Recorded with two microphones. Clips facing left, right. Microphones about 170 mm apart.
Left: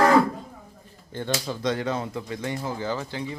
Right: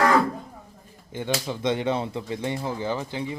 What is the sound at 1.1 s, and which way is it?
Speech, 15° right (ahead or behind).